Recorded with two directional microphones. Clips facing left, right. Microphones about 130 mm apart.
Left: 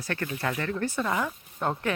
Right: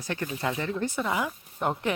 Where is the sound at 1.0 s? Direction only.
10° right (ahead or behind).